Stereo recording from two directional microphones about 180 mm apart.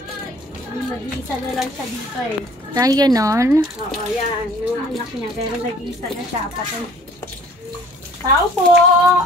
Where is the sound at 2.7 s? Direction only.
20° right (ahead or behind).